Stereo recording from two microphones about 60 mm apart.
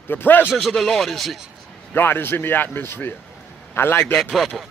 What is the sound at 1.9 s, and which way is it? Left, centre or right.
A man's voice, left.